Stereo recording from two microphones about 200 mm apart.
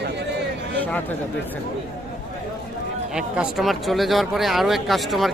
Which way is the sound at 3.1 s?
5° right (ahead or behind).